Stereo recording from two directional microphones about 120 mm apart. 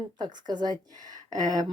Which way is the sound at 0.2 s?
35° right (ahead or behind).